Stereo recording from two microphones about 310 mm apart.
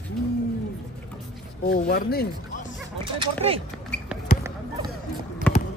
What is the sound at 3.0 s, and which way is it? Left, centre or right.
Speech, centre.